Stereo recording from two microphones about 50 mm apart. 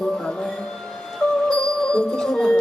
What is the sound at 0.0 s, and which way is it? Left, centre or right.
Music, centre.